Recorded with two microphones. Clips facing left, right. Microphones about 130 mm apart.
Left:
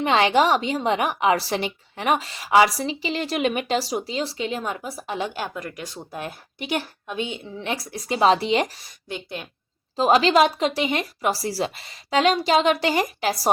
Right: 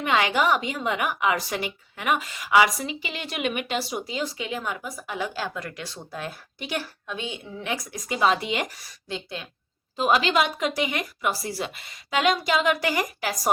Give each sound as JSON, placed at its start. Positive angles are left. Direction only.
{"t": 0.0, "sound": "a woman's voice", "side_deg": 30}
{"t": 10.0, "sound": "a woman's voice", "side_deg": 35}